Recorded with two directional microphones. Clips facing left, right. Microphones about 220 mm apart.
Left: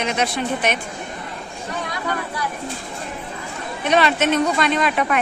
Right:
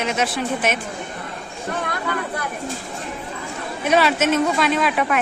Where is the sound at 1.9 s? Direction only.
55° right (ahead or behind).